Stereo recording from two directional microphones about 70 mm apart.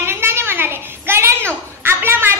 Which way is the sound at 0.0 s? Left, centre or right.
Right.